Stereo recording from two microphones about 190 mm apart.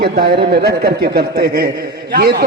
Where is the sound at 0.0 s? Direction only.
55° right (ahead or behind).